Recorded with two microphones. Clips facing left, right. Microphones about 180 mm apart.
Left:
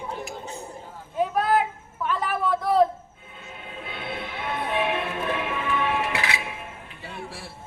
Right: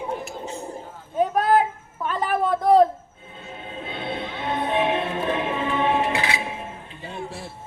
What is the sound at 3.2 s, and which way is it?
Music, 30° right (ahead or behind).